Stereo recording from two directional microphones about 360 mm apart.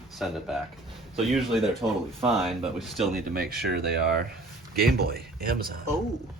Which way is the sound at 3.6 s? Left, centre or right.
Right.